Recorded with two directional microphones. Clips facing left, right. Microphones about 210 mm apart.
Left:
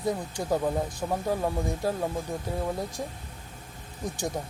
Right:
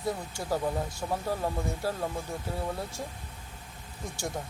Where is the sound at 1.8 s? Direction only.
15° left (ahead or behind).